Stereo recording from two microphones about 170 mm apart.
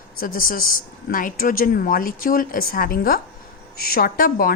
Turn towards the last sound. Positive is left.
turn(degrees=60)  # may be behind; listen again after turning